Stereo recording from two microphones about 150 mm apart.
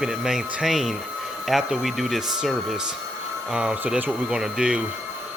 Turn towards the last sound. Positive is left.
turn(degrees=-5)  # may be behind; listen again after turning